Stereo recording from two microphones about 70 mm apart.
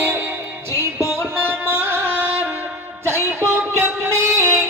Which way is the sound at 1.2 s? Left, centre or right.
Right.